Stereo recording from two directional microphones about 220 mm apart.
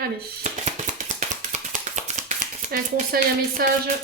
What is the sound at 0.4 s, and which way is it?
Tap, 35° right (ahead or behind).